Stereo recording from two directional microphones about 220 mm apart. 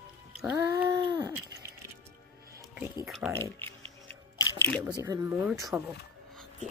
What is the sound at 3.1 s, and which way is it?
Speech, centre (ahead or behind).